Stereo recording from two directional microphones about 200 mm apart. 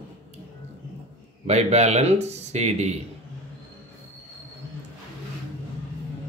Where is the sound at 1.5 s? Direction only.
35° right (ahead or behind).